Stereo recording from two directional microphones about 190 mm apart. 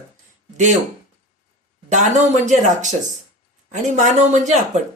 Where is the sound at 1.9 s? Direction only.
40° right (ahead or behind).